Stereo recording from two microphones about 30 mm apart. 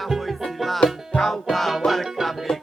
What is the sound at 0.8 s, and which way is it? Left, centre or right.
Music, left.